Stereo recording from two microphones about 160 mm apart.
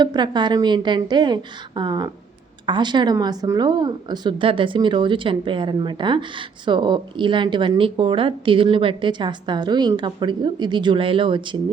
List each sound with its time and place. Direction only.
0.0 s a woman's voice: 25° right (ahead or behind)